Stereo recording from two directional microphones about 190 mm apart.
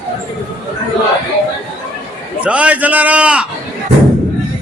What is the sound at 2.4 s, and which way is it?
A man's voice, 5° right (ahead or behind).